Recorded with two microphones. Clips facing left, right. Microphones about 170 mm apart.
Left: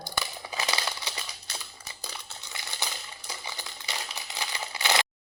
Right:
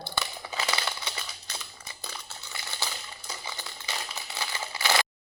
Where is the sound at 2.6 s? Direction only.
20° left (ahead or behind).